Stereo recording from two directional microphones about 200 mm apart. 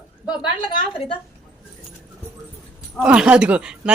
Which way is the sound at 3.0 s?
5° right (ahead or behind).